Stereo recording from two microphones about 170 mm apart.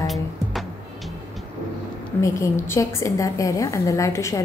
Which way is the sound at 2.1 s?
15° left (ahead or behind).